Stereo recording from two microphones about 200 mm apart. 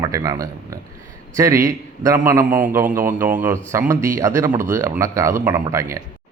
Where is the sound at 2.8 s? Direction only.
40° right (ahead or behind).